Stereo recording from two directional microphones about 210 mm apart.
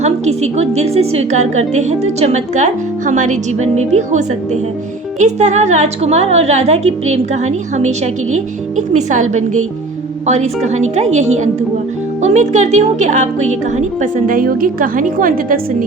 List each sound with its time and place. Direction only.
0.0 s a woman's voice: 30° right (ahead or behind)
10.2 s a woman's voice: 35° right (ahead or behind)